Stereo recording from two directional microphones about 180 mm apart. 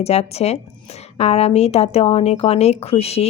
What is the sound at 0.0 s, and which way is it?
A woman's voice, 35° left (ahead or behind).